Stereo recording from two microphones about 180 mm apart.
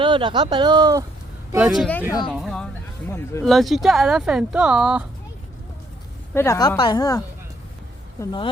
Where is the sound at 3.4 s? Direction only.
Centre (ahead or behind).